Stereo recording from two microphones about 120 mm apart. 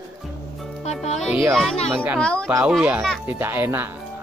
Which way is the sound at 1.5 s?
5° left (ahead or behind).